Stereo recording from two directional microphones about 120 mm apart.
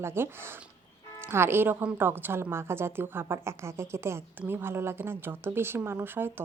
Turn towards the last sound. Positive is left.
turn(degrees=-20)  # may be behind; listen again after turning